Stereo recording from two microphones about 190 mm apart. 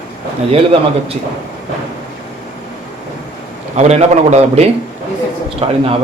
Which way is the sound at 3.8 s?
35° right (ahead or behind).